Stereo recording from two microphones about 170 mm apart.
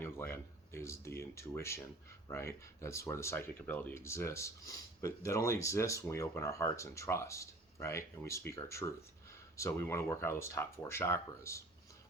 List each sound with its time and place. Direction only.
0.0 s speech: 15° left (ahead or behind)